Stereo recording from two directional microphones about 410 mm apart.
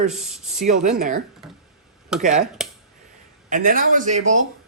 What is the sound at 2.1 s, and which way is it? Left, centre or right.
Speech, centre.